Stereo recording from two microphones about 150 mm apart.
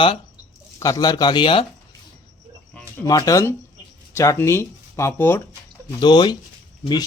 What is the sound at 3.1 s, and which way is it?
Speech, 25° left (ahead or behind).